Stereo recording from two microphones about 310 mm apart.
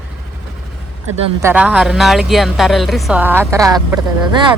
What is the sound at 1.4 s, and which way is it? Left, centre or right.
A woman's voice, centre.